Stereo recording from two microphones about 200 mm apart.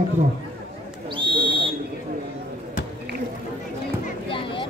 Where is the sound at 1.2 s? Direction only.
25° right (ahead or behind).